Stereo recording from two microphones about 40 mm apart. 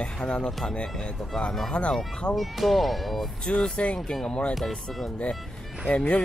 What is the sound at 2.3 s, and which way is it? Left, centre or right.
Speech, centre.